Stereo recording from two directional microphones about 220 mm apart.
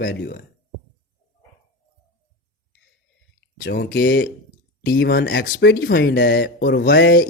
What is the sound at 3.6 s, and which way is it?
Speech, 50° left (ahead or behind).